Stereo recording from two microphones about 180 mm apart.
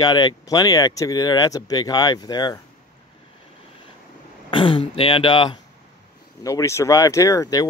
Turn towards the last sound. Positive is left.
turn(degrees=20)  # may be behind; listen again after turning